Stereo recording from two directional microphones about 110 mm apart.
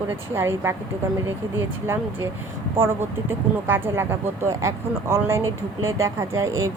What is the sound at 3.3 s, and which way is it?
Speech, 20° right (ahead or behind).